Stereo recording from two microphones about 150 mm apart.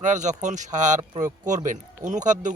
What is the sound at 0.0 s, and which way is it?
A man's voice, 55° right (ahead or behind).